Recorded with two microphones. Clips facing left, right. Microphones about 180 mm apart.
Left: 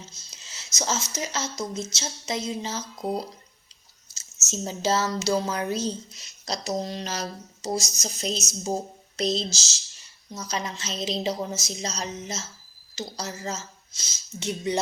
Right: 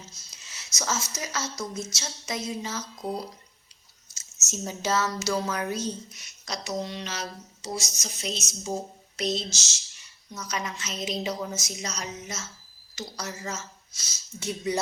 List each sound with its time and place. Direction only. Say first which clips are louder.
0.3 s speech: left 1 dB; 25° left (ahead or behind)